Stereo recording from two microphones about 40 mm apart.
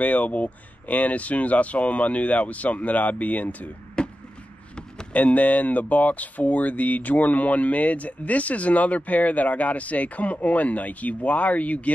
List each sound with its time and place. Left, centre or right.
0.0 s speech: left
4.0 s a sound: left
5.1 s speech: left